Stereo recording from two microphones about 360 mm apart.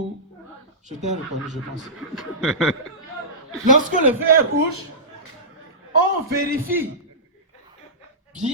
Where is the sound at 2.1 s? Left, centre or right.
Centre.